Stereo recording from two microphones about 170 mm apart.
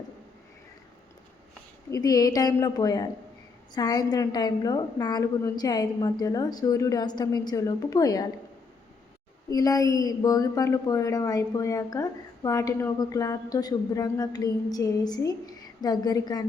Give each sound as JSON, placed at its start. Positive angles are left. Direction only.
{"t": 1.9, "sound": "a woman's voice", "side_deg": 20}
{"t": 9.5, "sound": "a woman's voice", "side_deg": 20}